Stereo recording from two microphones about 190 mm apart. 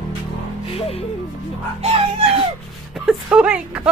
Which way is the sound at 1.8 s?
30° right (ahead or behind).